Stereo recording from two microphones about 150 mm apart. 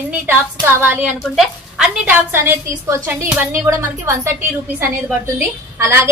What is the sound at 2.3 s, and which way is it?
A woman's voice, 15° right (ahead or behind).